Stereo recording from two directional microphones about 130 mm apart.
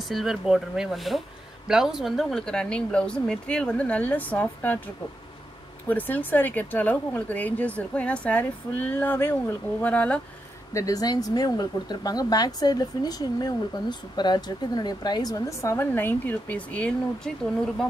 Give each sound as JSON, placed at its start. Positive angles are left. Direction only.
{"t": 0.0, "sound": "speech", "side_deg": 0}
{"t": 10.7, "sound": "speech", "side_deg": 25}